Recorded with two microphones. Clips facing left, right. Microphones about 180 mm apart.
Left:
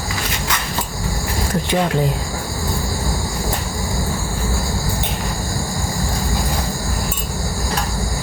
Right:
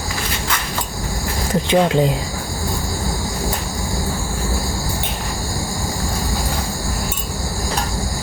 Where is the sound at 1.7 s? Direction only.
20° right (ahead or behind).